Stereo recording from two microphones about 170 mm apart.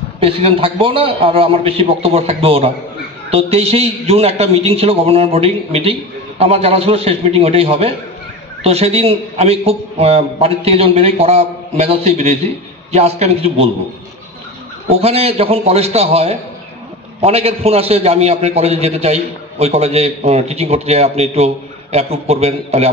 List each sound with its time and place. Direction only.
0.2 s a man's voice: 35° right (ahead or behind)
15.0 s a man's voice: 35° right (ahead or behind)